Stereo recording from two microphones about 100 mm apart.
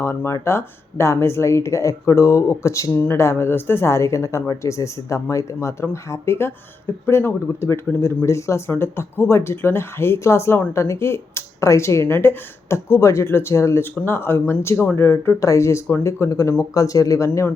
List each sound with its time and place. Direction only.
0.0 s speech: 25° left (ahead or behind)